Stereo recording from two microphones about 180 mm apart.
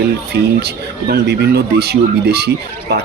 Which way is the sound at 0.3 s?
65° right (ahead or behind).